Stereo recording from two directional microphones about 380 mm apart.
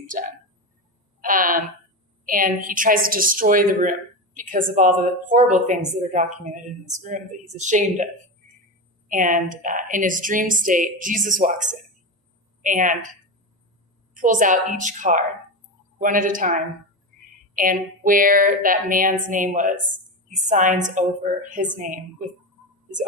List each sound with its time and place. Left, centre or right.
0.0 s a sound: right
2.2 s a woman's voice: right
9.0 s a woman's voice: right
14.1 s a woman's voice: centre